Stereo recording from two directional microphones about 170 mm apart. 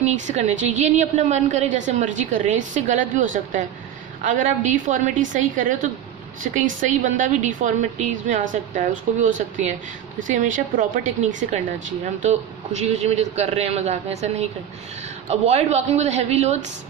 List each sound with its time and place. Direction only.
0.0 s a woman's voice: 40° right (ahead or behind)